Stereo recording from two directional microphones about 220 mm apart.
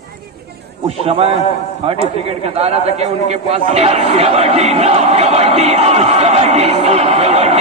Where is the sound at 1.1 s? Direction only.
25° right (ahead or behind).